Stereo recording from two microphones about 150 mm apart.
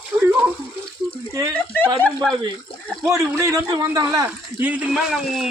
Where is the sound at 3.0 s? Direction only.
20° right (ahead or behind).